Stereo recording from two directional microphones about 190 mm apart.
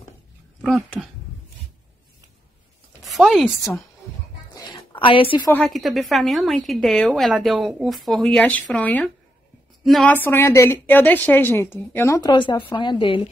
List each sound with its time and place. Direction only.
0.6 s speech: centre (ahead or behind)
3.1 s speech: centre (ahead or behind)
4.6 s a sound: 25° left (ahead or behind)
5.5 s a woman's voice: 5° left (ahead or behind); by 13.3 s 25° left (ahead or behind)